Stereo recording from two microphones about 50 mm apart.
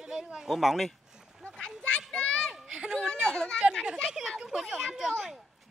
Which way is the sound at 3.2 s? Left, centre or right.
Centre.